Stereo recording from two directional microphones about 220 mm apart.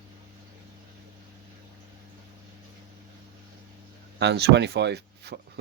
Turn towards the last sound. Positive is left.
turn(degrees=-50)  # may be behind; listen again after turning